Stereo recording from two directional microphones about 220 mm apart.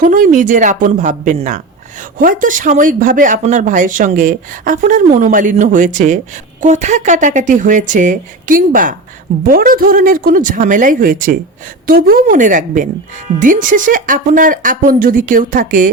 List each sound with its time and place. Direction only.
0.0 s a man's voice: 35° right (ahead or behind)